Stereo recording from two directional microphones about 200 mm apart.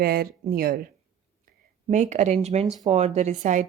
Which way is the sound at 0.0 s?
50° right (ahead or behind).